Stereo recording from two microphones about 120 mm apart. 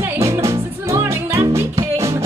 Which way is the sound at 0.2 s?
25° right (ahead or behind).